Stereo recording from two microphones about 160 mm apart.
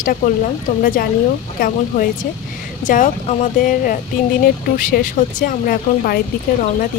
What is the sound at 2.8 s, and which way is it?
Speech, 50° left (ahead or behind).